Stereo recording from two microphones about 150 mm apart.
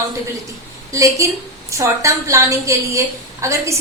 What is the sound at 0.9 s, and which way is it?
A woman's voice, 20° right (ahead or behind).